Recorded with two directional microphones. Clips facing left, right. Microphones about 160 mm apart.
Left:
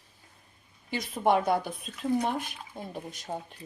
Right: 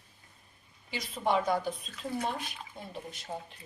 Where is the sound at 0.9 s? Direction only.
50° left (ahead or behind).